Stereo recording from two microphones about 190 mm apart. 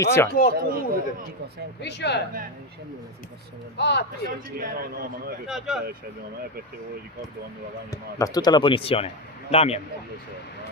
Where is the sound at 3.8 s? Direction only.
65° left (ahead or behind).